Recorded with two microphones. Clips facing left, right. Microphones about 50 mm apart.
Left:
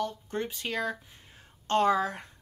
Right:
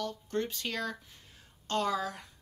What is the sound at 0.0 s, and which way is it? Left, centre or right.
Speech, centre.